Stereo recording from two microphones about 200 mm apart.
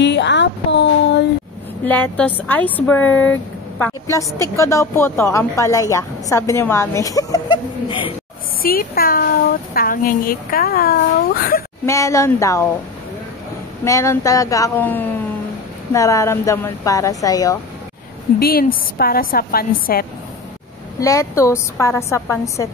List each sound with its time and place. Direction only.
0.0 s a sound: 60° left (ahead or behind)
1.9 s a woman's voice: 10° left (ahead or behind); by 8.1 s 25° left (ahead or behind)
8.6 s a woman's voice: 45° left (ahead or behind)
11.8 s a woman's voice: 15° left (ahead or behind)
13.8 s a woman's voice: 15° left (ahead or behind)
18.4 s a woman's voice: 50° left (ahead or behind)
21.0 s a woman's voice: 15° left (ahead or behind)